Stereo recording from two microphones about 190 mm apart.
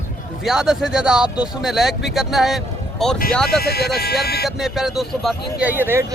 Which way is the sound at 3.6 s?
55° left (ahead or behind).